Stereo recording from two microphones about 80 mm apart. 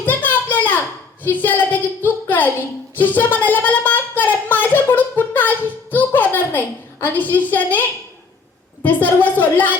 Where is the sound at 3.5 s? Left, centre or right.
Left.